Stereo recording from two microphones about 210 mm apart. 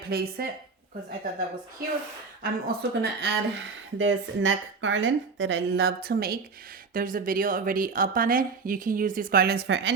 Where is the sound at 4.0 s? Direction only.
65° right (ahead or behind).